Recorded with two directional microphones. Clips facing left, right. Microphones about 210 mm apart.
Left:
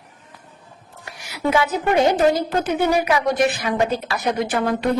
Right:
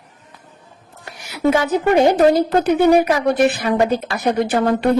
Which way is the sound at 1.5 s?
45° right (ahead or behind).